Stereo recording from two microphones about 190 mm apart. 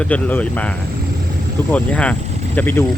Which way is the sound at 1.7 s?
5° left (ahead or behind).